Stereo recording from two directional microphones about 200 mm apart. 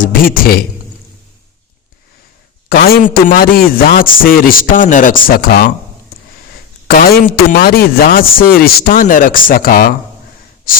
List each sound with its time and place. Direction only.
0.0 s a man's voice: 45° left (ahead or behind)
2.6 s a man's voice: 50° left (ahead or behind)
6.8 s a man's voice: 45° left (ahead or behind)